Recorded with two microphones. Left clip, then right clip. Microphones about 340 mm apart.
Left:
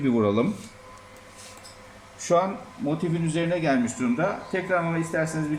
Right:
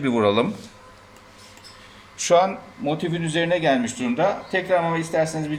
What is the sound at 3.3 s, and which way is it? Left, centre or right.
Speech, right.